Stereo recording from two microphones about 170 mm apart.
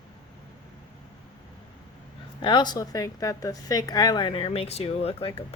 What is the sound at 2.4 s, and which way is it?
Speech, 25° left (ahead or behind).